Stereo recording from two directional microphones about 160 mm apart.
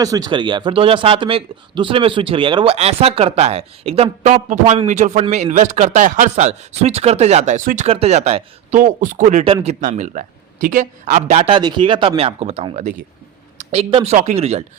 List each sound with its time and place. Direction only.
0.0 s speech: 25° right (ahead or behind); by 8.8 s 45° right (ahead or behind)
8.8 s a woman's voice: 55° right (ahead or behind)